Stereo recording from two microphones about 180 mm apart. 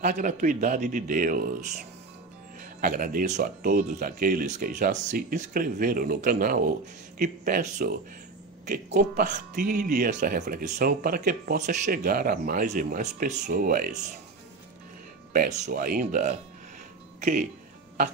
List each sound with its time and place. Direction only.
0.0 s speech: 45° right (ahead or behind)
2.6 s speech: 50° right (ahead or behind)
12.0 s speech: 55° right (ahead or behind)
15.3 s speech: 45° right (ahead or behind)